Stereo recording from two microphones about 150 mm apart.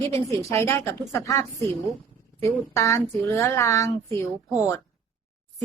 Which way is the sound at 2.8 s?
20° left (ahead or behind).